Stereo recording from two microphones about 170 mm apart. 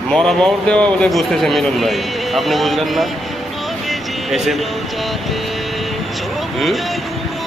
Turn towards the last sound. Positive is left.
turn(degrees=0)  # may be behind; listen again after turning